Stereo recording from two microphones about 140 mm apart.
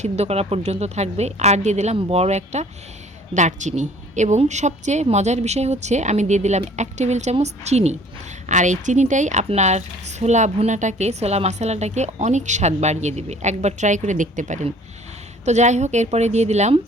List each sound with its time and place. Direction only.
0.0 s a woman's voice: 50° right (ahead or behind)